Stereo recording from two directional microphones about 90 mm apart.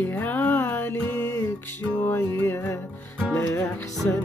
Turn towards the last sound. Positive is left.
turn(degrees=20)  # may be behind; listen again after turning